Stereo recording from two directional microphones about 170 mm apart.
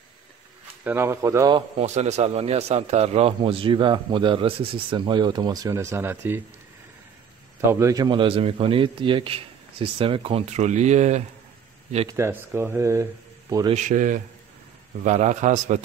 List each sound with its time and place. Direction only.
0.8 s speech: 15° right (ahead or behind)
1.8 s a man's voice: 40° right (ahead or behind); by 6.4 s 15° right (ahead or behind)
7.7 s a man's voice: 20° right (ahead or behind); by 11.2 s 40° right (ahead or behind)
12.1 s speech: 15° right (ahead or behind)
13.7 s a man's voice: 50° right (ahead or behind)